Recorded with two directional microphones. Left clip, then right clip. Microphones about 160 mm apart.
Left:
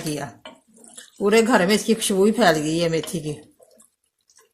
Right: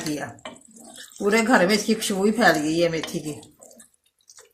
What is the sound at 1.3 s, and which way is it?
Speech, 65° left (ahead or behind).